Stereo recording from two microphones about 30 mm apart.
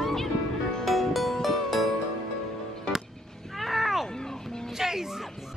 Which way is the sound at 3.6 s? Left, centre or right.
Centre.